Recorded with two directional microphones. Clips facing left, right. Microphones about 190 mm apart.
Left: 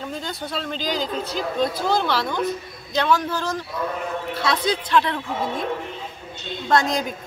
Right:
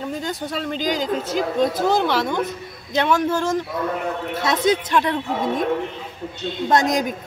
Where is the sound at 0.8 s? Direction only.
45° right (ahead or behind).